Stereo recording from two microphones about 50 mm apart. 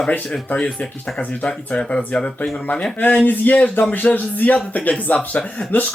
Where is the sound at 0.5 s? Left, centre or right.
Left.